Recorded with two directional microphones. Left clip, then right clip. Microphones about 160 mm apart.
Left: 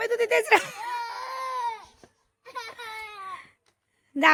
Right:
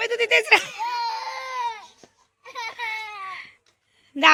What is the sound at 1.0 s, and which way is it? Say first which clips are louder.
Baby cry: right 4 dB; 80° left.